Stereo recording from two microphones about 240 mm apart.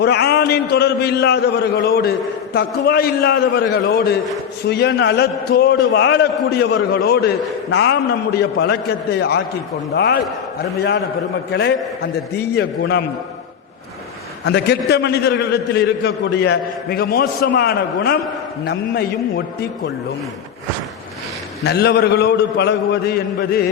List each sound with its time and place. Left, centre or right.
0.0 s a man's voice: left
11.5 s a man's voice: left
14.4 s a man's voice: left
21.6 s a man's voice: left